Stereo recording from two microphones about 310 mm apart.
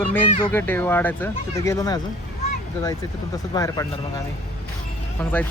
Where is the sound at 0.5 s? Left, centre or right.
Centre.